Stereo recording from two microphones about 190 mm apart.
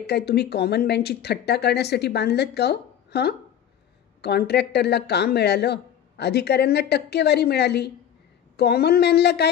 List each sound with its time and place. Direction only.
0.0 s speech: 60° left (ahead or behind)